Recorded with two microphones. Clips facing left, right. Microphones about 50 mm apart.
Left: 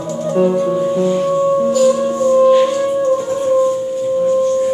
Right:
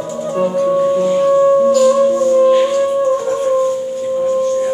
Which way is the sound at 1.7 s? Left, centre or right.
Right.